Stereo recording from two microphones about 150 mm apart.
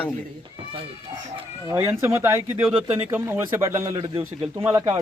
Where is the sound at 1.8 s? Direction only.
15° right (ahead or behind).